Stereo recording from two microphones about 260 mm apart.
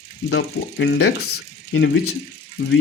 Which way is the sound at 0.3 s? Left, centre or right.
Left.